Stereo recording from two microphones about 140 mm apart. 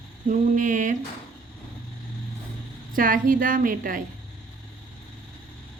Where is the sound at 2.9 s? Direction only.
75° right (ahead or behind).